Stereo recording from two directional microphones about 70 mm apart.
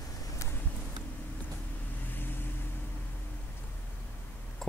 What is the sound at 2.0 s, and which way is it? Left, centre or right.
Vehicle, left.